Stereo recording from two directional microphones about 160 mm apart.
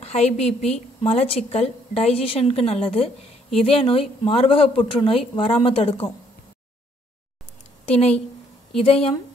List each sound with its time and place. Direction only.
0.0 s a woman's voice: 40° left (ahead or behind)
7.8 s a woman's voice: 40° left (ahead or behind)